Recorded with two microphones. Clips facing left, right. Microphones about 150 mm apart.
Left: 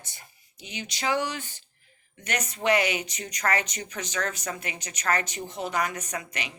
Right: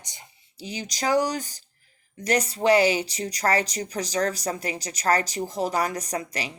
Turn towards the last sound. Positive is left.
turn(degrees=-35)  # may be behind; listen again after turning